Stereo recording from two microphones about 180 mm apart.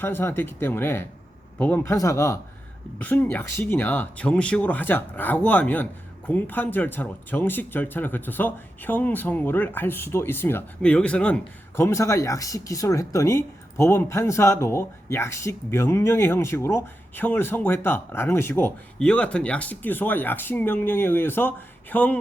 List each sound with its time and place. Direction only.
0.0 s speech: 10° left (ahead or behind)